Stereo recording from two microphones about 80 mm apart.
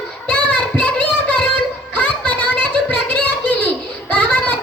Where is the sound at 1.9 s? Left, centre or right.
Centre.